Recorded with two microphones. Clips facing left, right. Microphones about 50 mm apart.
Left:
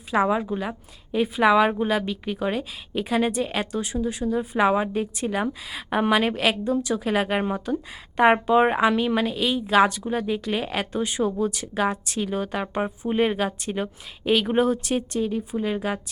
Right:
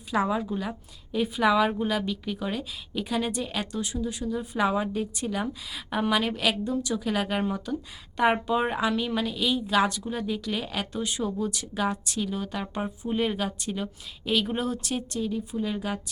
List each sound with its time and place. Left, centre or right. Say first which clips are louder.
0.1 s a woman's voice: left 4 dB; left